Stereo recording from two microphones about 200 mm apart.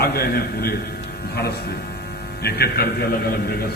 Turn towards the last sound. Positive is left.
turn(degrees=50)  # may be behind; listen again after turning